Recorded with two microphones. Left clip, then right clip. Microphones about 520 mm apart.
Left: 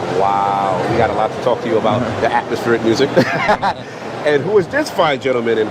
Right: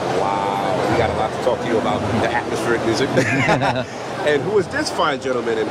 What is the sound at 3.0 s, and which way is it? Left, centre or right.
Speech, left.